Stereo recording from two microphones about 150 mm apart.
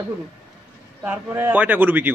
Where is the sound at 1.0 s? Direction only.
15° right (ahead or behind).